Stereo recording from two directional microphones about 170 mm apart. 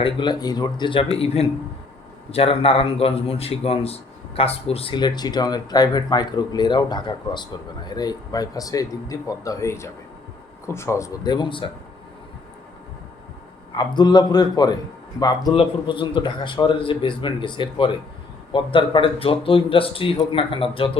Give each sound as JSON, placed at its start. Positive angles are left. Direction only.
{"t": 0.0, "sound": "speech", "side_deg": 25}
{"t": 13.7, "sound": "speech", "side_deg": 25}